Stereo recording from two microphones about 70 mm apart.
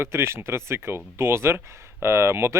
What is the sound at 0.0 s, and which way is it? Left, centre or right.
Speech, right.